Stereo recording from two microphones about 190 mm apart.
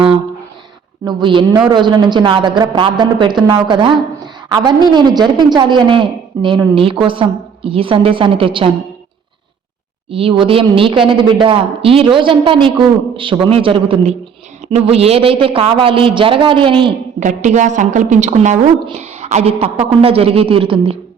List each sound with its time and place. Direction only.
1.0 s a woman's voice: 25° right (ahead or behind)
10.1 s a woman's voice: 30° right (ahead or behind)
17.2 s a woman's voice: 40° right (ahead or behind)